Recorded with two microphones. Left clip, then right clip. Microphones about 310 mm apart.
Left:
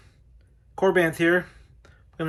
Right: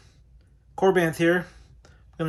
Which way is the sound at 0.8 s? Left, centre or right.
Centre.